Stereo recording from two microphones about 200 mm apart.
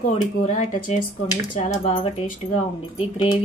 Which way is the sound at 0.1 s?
35° left (ahead or behind).